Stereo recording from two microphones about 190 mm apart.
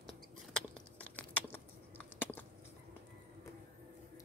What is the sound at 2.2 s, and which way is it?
Chewing, 10° left (ahead or behind).